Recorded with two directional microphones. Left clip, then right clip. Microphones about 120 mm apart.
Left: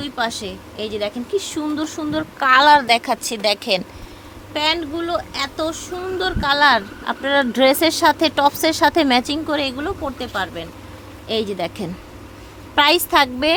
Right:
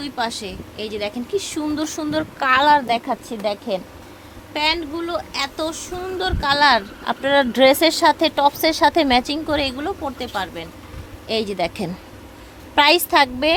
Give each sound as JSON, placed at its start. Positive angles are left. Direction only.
{"t": 0.0, "sound": "a woman's voice", "side_deg": 5}
{"t": 1.7, "sound": "speech", "side_deg": -20}
{"t": 2.4, "sound": "a woman's voice", "side_deg": 0}
{"t": 2.8, "sound": "speech", "side_deg": 30}
{"t": 3.2, "sound": "speech", "side_deg": 45}
{"t": 4.5, "sound": "a woman's voice", "side_deg": 0}